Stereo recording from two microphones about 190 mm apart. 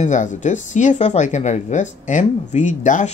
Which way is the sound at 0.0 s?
40° left (ahead or behind).